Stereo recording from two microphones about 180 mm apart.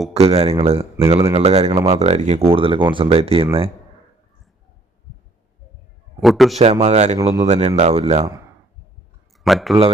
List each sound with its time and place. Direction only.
0.1 s speech: 35° right (ahead or behind)
6.1 s a man's voice: centre (ahead or behind)
6.8 s speech: 40° right (ahead or behind)
9.4 s speech: centre (ahead or behind)